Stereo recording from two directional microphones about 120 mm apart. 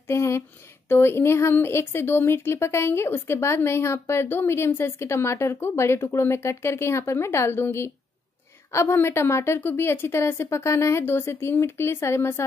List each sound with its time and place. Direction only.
0.1 s speech: 25° left (ahead or behind)